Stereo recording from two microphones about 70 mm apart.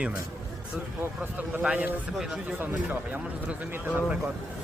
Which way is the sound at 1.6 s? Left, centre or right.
Centre.